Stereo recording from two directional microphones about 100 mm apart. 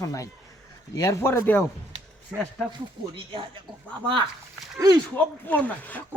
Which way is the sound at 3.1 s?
55° right (ahead or behind).